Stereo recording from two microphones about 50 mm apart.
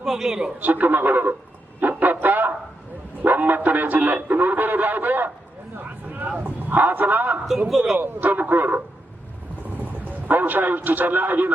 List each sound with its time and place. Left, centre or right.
0.0 s a woman's voice: centre
0.6 s music: right
5.7 s a sound: right
6.3 s a man's voice: right
7.9 s music: right
9.8 s a man's voice: right